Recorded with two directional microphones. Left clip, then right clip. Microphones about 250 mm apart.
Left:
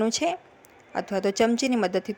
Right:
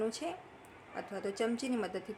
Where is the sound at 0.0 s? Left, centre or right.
Left.